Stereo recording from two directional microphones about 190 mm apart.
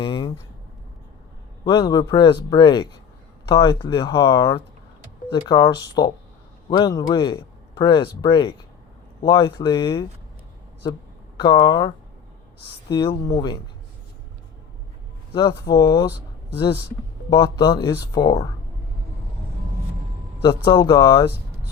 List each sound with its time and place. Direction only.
0.0 s a sound: 25° left (ahead or behind)
1.6 s a man's voice: 20° left (ahead or behind)
11.3 s a man's voice: 20° left (ahead or behind)
12.9 s a man's voice: 20° left (ahead or behind)
15.3 s a man's voice: 20° left (ahead or behind)
17.2 s a man's voice: 20° left (ahead or behind)
20.7 s a man's voice: 20° left (ahead or behind)